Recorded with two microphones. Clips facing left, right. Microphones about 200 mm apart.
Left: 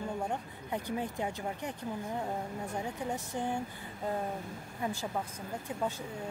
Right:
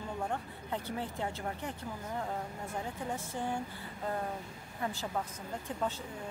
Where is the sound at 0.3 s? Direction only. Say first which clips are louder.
Left 1 dB; 15° left (ahead or behind).